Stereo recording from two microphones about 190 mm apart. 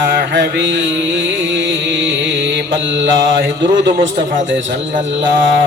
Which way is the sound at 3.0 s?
80° right.